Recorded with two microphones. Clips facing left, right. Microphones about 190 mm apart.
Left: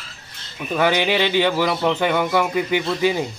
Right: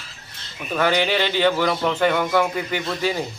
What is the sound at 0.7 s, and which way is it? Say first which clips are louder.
A man's voice: left 1 dB; 10° left (ahead or behind).